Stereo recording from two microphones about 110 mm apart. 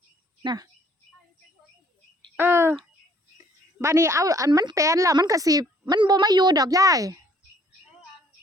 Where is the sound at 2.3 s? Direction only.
20° right (ahead or behind).